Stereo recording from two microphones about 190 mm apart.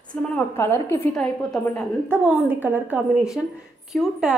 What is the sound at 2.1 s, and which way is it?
A woman's voice, 10° right (ahead or behind).